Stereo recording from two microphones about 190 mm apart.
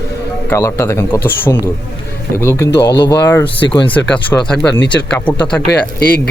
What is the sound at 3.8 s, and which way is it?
A man's voice, 5° left (ahead or behind).